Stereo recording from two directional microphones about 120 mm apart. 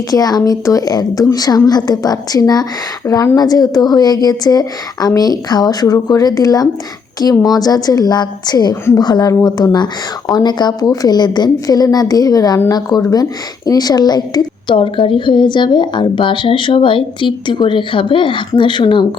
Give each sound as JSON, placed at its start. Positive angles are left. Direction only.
{"t": 0.1, "sound": "speech", "side_deg": 30}
{"t": 14.8, "sound": "speech", "side_deg": 45}